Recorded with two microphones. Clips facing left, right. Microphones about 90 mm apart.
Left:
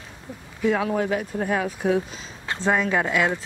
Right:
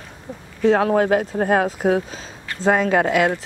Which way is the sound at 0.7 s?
55° right (ahead or behind).